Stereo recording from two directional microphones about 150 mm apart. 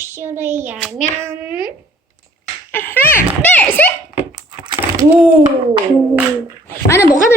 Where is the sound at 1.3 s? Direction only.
10° right (ahead or behind).